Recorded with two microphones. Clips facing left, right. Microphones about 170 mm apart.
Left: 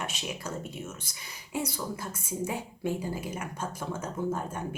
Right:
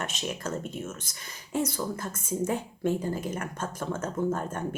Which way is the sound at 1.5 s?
10° left (ahead or behind).